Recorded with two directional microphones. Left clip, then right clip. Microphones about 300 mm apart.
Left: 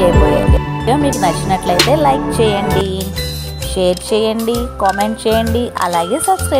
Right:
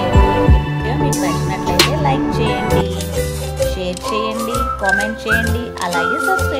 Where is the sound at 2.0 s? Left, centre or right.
Centre.